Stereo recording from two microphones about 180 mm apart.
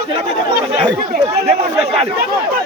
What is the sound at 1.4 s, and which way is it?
Speech, 35° right (ahead or behind).